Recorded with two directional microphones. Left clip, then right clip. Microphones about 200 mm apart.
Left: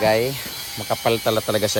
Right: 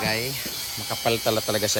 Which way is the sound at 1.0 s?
15° right (ahead or behind).